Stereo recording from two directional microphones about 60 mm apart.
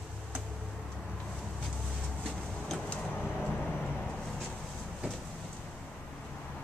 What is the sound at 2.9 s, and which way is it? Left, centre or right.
Vehicle, centre.